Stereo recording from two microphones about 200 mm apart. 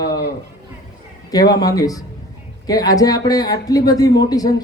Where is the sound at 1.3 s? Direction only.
20° left (ahead or behind).